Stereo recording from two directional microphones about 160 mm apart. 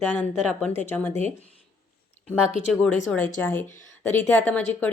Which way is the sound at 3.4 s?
15° left (ahead or behind).